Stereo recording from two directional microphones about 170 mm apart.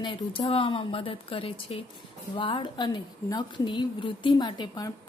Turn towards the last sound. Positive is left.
turn(degrees=25)  # may be behind; listen again after turning